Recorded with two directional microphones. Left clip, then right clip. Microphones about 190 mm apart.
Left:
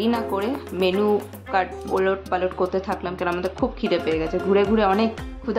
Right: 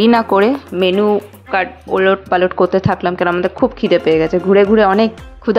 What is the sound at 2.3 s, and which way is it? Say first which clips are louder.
Speech: right 10 dB; 40° right (ahead or behind).